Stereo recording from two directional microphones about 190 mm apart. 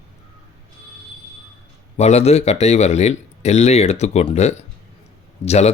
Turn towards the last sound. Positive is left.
turn(degrees=35)  # may be behind; listen again after turning